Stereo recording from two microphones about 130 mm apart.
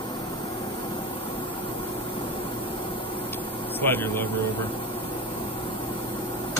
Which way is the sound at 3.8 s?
15° left (ahead or behind).